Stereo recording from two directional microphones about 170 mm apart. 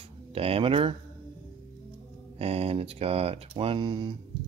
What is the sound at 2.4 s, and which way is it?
Speech, 35° right (ahead or behind).